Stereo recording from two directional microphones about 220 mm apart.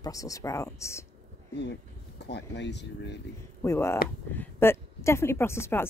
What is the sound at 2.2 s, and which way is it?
Speech, 50° left (ahead or behind).